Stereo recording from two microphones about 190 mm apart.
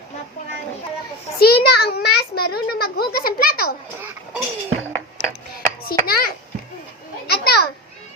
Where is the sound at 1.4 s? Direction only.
55° left (ahead or behind).